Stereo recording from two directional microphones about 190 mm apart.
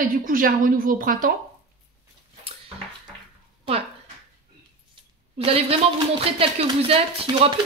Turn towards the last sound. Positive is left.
turn(degrees=-30)  # may be behind; listen again after turning